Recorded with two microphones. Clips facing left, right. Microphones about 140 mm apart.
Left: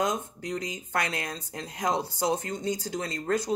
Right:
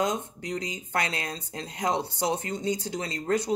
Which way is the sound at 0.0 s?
30° right (ahead or behind).